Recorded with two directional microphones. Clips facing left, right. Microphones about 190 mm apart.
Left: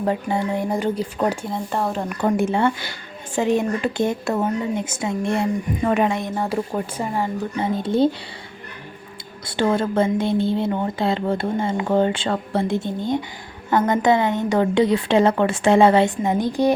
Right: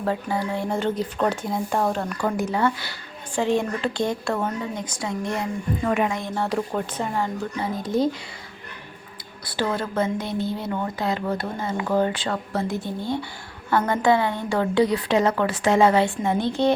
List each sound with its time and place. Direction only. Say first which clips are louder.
0.0 s speech: left 3 dB; 20° left (ahead or behind); by 2.0 s centre (ahead or behind)
2.1 s speech: left 4 dB; 25° left (ahead or behind); by 7.3 s 10° left (ahead or behind)
7.6 s speech: left 4 dB; 30° left (ahead or behind)
9.5 s speech: left 6 dB; 25° left (ahead or behind)